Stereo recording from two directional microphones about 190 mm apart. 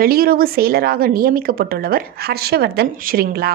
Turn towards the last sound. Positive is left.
turn(degrees=-55)  # may be behind; listen again after turning